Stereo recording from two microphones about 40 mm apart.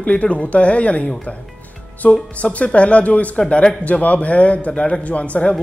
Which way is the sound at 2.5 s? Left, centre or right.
Left.